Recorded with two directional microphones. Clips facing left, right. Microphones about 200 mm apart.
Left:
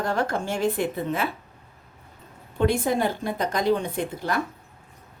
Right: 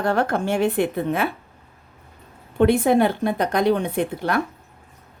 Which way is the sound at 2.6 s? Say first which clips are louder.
Right 6 dB; 60° right (ahead or behind).